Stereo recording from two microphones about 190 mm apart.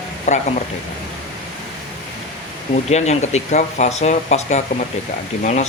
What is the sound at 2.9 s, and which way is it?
Speech, 35° left (ahead or behind).